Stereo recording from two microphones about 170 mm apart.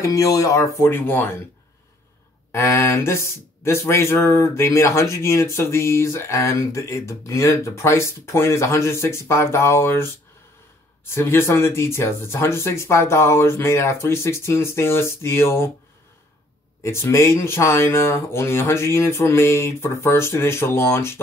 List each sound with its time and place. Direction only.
0.0 s speech: 20° left (ahead or behind)
2.5 s speech: 20° left (ahead or behind)
16.8 s speech: 15° left (ahead or behind)